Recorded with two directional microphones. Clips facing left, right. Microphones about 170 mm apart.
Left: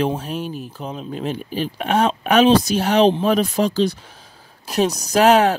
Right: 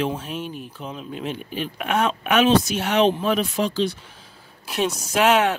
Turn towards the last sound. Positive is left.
turn(degrees=35)  # may be behind; listen again after turning